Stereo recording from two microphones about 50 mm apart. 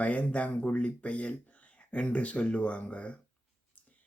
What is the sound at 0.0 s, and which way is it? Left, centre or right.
Speech, left.